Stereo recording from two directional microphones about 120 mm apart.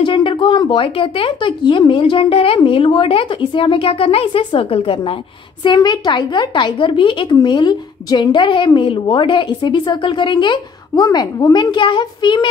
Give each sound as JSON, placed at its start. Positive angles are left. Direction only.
{"t": 0.0, "sound": "speech", "side_deg": 40}
{"t": 5.6, "sound": "a woman's voice", "side_deg": 35}